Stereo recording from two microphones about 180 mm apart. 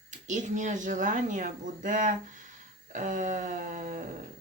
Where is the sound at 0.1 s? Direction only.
40° right (ahead or behind).